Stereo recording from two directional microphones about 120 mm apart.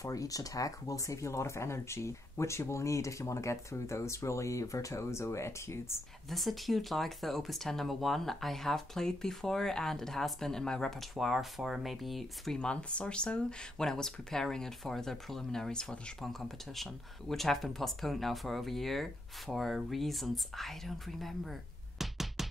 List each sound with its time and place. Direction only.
0.0 s speech: 30° left (ahead or behind)
6.3 s speech: centre (ahead or behind)